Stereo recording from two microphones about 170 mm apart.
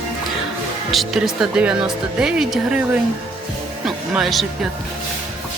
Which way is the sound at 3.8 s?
Centre (ahead or behind).